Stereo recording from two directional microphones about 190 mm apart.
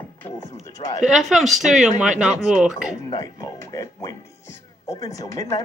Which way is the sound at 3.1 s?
20° left (ahead or behind).